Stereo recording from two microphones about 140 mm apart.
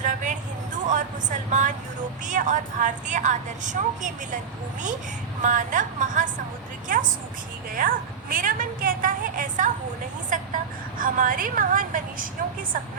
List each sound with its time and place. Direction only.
0.0 s vehicle: 65° right (ahead or behind)
1.5 s a woman's voice: 60° right (ahead or behind)
5.4 s a woman's voice: 65° right (ahead or behind)